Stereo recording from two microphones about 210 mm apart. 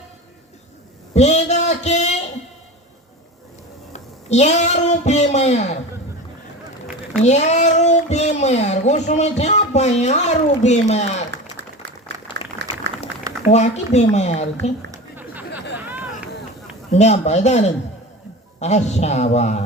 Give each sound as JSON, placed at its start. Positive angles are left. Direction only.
{"t": 1.1, "sound": "speech", "side_deg": 30}
{"t": 3.9, "sound": "speech", "side_deg": 30}
{"t": 7.2, "sound": "speech", "side_deg": 35}
{"t": 11.3, "sound": "applause", "side_deg": -55}
{"t": 12.9, "sound": "a sound", "side_deg": -55}
{"t": 13.5, "sound": "speech", "side_deg": 30}
{"t": 14.8, "sound": "chatter", "side_deg": -10}
{"t": 16.9, "sound": "speech", "side_deg": 30}